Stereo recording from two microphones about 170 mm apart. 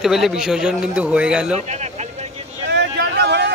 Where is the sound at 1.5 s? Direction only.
40° right (ahead or behind).